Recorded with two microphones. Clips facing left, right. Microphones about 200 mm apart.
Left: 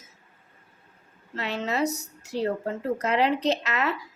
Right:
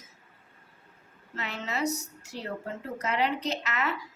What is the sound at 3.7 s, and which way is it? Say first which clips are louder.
Speech: left 4 dB; 35° left (ahead or behind).